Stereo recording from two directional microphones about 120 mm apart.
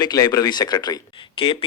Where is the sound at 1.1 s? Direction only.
45° left (ahead or behind).